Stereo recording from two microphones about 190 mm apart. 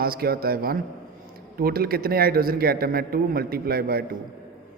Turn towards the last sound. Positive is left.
turn(degrees=-55)  # may be behind; listen again after turning